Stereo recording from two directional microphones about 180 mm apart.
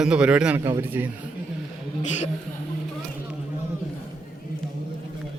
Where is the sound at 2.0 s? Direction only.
40° left (ahead or behind).